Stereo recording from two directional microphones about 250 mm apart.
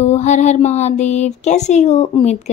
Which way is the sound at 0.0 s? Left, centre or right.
Left.